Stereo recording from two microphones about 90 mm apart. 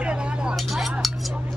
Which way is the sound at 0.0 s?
10° right (ahead or behind).